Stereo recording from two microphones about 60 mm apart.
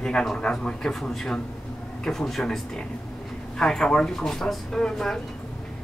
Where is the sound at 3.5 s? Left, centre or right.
Centre.